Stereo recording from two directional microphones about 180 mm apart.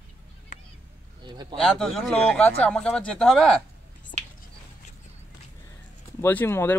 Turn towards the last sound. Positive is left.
turn(degrees=15)  # may be behind; listen again after turning